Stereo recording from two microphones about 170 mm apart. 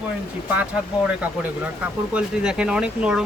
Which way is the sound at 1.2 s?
10° right (ahead or behind).